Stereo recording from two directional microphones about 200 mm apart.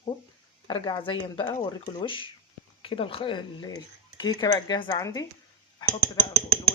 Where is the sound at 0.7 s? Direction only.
25° left (ahead or behind).